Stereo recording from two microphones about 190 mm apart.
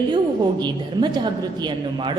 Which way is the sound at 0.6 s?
25° right (ahead or behind).